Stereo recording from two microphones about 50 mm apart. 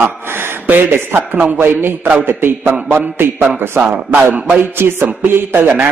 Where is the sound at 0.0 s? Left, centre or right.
Right.